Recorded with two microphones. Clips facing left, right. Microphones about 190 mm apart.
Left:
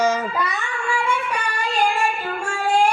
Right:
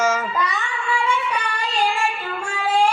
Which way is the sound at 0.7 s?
50° left (ahead or behind).